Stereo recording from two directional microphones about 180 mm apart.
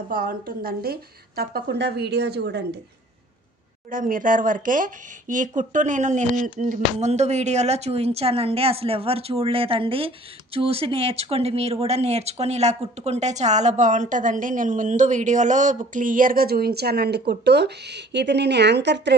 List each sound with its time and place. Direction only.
0.1 s a woman's voice: 50° right (ahead or behind)
3.9 s speech: 50° right (ahead or behind); by 19.1 s 75° right (ahead or behind)